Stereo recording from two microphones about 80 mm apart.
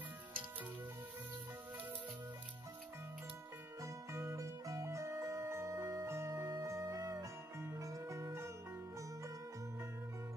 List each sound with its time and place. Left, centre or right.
3.8 s music: right
6.0 s music: right